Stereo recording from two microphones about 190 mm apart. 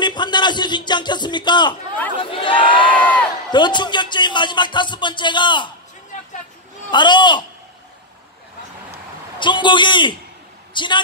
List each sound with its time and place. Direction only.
0.0 s speech: 25° left (ahead or behind)
6.9 s speech: 25° left (ahead or behind)
9.4 s a woman's voice: 25° left (ahead or behind)